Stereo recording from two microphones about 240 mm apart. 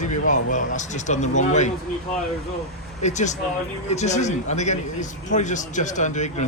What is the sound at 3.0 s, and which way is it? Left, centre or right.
Speech, left.